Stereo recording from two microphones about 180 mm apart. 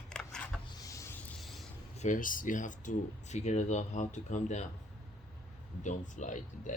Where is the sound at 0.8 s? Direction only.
20° left (ahead or behind).